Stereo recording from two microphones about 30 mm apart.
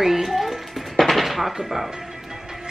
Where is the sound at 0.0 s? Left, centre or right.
Centre.